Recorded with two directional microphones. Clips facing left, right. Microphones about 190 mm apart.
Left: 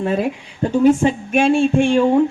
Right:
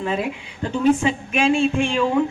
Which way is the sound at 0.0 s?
45° left (ahead or behind).